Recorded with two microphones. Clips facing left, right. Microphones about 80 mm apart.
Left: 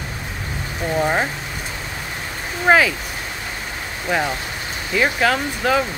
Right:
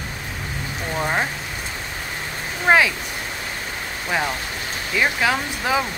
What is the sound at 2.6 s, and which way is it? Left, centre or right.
Speech, centre.